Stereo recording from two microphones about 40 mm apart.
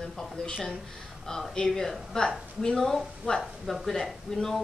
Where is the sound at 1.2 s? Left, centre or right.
Centre.